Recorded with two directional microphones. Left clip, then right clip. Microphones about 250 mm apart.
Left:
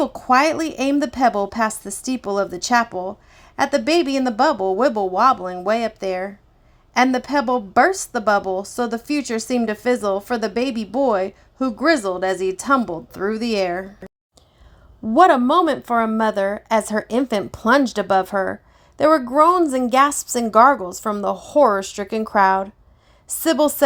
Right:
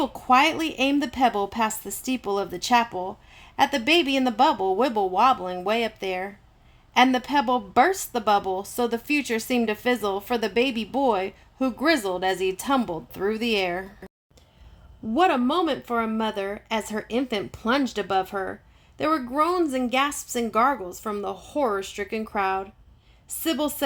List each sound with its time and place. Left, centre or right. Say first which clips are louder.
0.0 s a woman's voice: left 3 dB; centre
15.1 s a woman's voice: left 8 dB; left